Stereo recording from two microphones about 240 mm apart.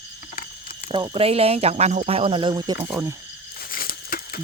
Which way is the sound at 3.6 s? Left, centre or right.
Left.